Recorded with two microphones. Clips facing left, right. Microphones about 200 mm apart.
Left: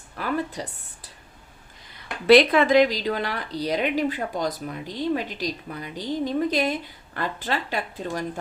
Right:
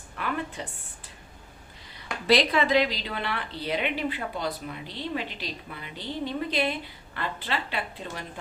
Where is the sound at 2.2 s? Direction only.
60° left (ahead or behind); by 8.2 s 45° left (ahead or behind).